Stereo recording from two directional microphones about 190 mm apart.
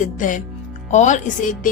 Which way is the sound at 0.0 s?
45° left (ahead or behind).